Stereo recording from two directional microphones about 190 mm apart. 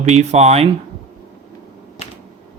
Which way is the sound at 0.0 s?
35° right (ahead or behind).